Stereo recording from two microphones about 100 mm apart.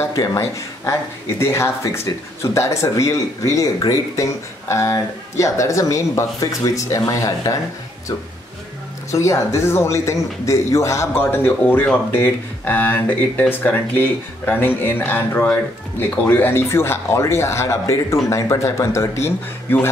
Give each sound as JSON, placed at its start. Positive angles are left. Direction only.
{"t": 0.1, "sound": "speech", "side_deg": 35}
{"t": 9.1, "sound": "speech", "side_deg": 30}
{"t": 11.6, "sound": "speech", "side_deg": 10}